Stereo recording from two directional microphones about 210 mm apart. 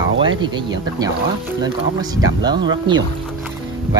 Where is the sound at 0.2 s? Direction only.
20° right (ahead or behind).